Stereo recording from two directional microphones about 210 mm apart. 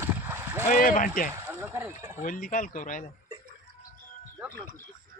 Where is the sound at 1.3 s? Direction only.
10° right (ahead or behind).